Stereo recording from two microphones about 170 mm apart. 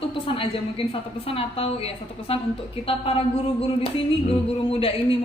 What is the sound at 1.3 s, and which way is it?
Speech, 35° left (ahead or behind).